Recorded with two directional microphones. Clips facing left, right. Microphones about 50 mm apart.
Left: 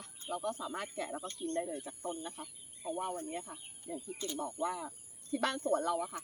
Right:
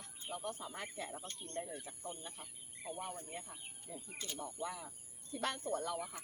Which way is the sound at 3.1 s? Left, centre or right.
Left.